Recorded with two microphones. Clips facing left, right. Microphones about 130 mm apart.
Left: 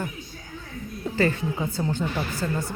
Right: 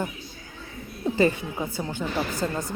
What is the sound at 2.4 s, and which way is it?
Speech, 25° right (ahead or behind).